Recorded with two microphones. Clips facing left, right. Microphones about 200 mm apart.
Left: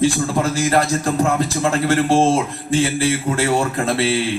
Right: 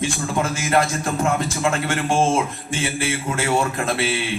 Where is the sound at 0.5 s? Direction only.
35° left (ahead or behind).